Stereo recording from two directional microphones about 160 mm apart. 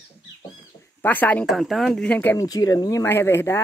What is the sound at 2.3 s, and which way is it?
Speech, 25° left (ahead or behind).